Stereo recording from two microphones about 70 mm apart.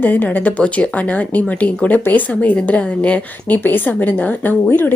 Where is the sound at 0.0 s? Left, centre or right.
Left.